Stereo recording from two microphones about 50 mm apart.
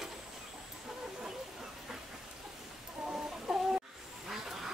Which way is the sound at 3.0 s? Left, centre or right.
Centre.